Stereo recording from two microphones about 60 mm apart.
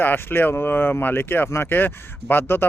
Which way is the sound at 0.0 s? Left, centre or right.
Left.